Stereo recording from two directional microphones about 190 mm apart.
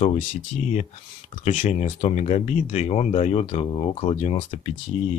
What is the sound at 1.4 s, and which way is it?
Speech, 40° left (ahead or behind).